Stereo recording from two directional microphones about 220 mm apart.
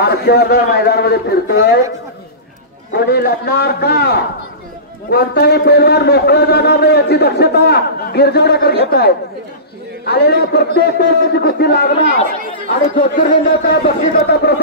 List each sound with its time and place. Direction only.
0.0 s a man's voice: 45° left (ahead or behind)
2.9 s a man's voice: 45° left (ahead or behind)
12.9 s a man's voice: 40° left (ahead or behind)